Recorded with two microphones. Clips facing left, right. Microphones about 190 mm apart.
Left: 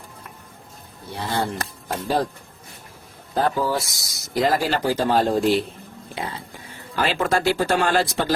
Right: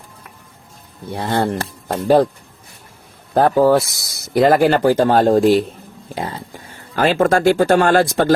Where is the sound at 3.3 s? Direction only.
60° right (ahead or behind).